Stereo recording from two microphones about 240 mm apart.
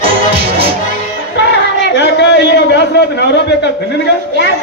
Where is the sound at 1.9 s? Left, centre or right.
Left.